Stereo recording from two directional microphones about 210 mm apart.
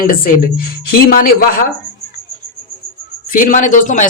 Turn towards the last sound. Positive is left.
turn(degrees=35)  # may be behind; listen again after turning